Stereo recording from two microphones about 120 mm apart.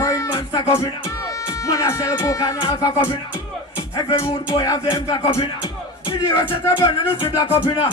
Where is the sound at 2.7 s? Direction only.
30° left (ahead or behind).